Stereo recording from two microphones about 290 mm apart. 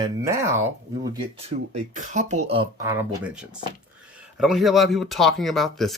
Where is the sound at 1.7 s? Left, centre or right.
Right.